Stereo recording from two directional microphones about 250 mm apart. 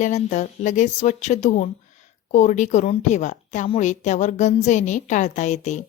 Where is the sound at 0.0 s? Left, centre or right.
Left.